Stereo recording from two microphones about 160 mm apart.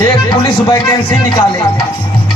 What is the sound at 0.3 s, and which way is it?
Music, 30° left (ahead or behind).